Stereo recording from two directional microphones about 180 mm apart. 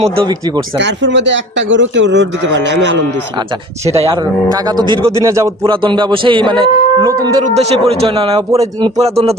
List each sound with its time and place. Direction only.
0.0 s speech: 30° right (ahead or behind)
0.8 s a man's voice: 80° right
4.0 s speech: 20° right (ahead or behind)
7.4 s a man's voice: 35° right (ahead or behind)
8.5 s speech: 20° right (ahead or behind)
9.0 s a man's voice: 35° right (ahead or behind)